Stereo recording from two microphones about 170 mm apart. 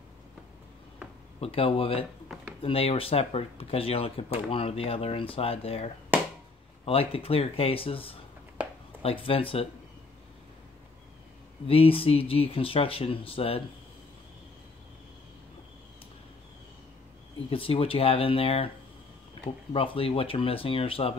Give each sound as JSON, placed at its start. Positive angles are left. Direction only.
{"t": 1.4, "sound": "speech", "side_deg": 35}
{"t": 6.9, "sound": "speech", "side_deg": 35}
{"t": 11.6, "sound": "speech", "side_deg": 35}
{"t": 17.5, "sound": "speech", "side_deg": 30}
{"t": 19.7, "sound": "speech", "side_deg": 30}